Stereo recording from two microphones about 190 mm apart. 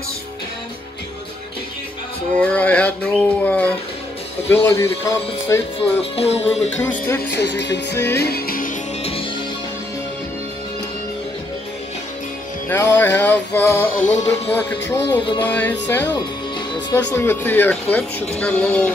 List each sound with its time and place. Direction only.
2.3 s a sound: 5° left (ahead or behind)
4.5 s speech: 15° left (ahead or behind)
5.8 s music: 30° left (ahead or behind)
6.8 s speech: 10° left (ahead or behind)
7.2 s music: 60° left (ahead or behind)
12.6 s speech: 10° left (ahead or behind)
14.1 s music: 35° left (ahead or behind)
14.5 s speech: 10° left (ahead or behind)